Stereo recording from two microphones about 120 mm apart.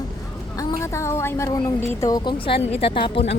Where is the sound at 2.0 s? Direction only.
35° left (ahead or behind).